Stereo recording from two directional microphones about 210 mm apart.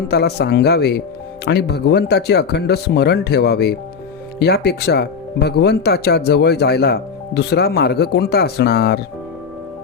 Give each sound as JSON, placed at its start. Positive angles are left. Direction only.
{"t": 0.1, "sound": "speech", "side_deg": 50}